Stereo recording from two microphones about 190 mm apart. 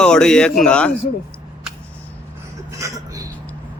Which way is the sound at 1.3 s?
5° left (ahead or behind).